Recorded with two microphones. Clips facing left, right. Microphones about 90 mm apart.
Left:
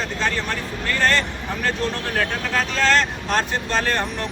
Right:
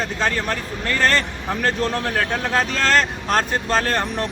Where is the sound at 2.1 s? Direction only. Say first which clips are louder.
Right 1 dB; 40° right (ahead or behind).